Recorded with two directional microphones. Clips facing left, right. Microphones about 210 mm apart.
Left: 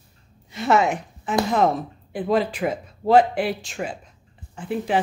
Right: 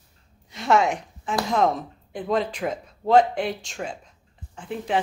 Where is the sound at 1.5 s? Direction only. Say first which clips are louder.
Right 1 dB; 5° left (ahead or behind).